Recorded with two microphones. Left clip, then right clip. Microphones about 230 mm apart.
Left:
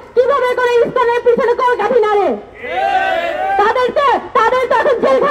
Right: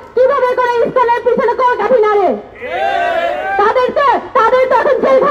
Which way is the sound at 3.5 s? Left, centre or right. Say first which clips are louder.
Right 2 dB; left.